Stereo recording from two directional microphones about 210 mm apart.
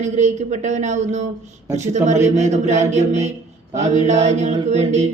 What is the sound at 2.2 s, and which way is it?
Speech, 15° right (ahead or behind).